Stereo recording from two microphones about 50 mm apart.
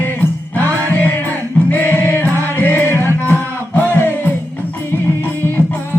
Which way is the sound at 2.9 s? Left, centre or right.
Right.